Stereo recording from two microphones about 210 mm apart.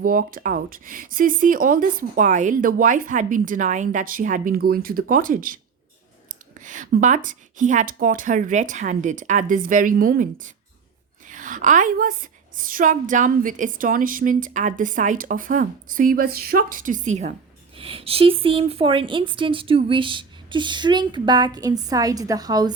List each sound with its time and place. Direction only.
0.0 s a woman's voice: 40° right (ahead or behind); by 22.7 s 20° right (ahead or behind)